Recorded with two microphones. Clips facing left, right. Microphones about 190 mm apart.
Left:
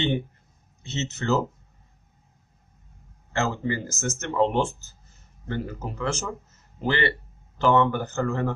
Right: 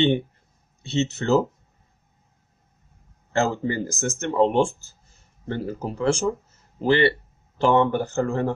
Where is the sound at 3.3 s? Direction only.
35° right (ahead or behind).